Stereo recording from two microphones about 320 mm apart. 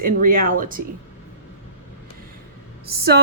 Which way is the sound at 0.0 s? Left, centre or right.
Right.